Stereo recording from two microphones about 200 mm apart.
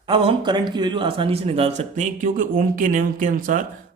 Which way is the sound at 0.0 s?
25° right (ahead or behind).